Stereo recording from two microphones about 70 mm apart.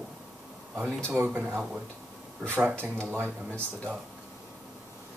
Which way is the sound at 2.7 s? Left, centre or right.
Right.